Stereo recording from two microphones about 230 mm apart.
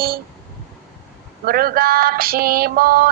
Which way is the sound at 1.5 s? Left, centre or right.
Right.